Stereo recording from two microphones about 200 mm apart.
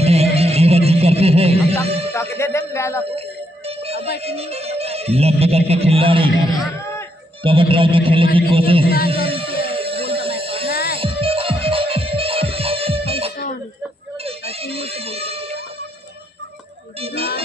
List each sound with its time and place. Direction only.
0.0 s a sound: 30° right (ahead or behind)
1.9 s music: 30° right (ahead or behind)
2.1 s speech: 15° left (ahead or behind)
3.2 s music: 30° right (ahead or behind)
7.4 s speech: 25° right (ahead or behind)
8.8 s music: 50° left (ahead or behind)
9.1 s music: 25° right (ahead or behind)
10.7 s music: 50° left (ahead or behind)
11.0 s music: 25° right (ahead or behind)
14.2 s a sound: 30° right (ahead or behind)
17.0 s speech: 30° right (ahead or behind)